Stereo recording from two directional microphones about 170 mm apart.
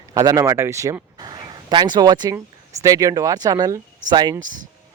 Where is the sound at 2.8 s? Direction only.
20° right (ahead or behind).